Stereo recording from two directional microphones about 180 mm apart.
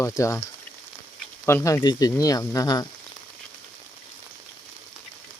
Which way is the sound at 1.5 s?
15° left (ahead or behind).